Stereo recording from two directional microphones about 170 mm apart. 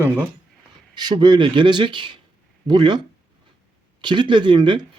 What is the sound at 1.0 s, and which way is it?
Speech, 25° right (ahead or behind).